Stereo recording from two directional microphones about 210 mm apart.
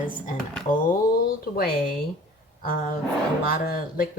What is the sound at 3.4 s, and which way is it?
Speech, 45° left (ahead or behind).